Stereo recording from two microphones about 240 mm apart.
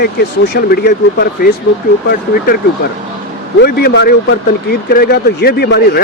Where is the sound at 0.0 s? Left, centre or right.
Left.